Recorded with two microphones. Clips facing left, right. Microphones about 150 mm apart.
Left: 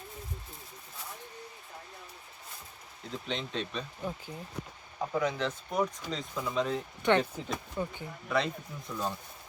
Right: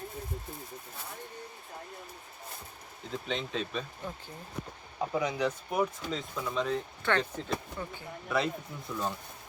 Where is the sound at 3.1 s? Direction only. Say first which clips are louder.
Right 1 dB; centre (ahead or behind).